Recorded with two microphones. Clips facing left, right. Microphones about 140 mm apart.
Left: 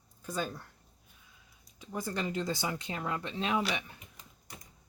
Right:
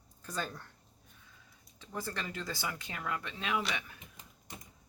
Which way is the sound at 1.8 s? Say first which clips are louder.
Left 4 dB; 15° left (ahead or behind).